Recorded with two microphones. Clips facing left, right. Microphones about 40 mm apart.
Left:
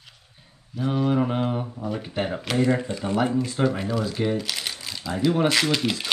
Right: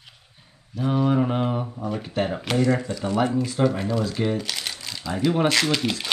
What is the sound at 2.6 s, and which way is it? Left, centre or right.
Speech, left.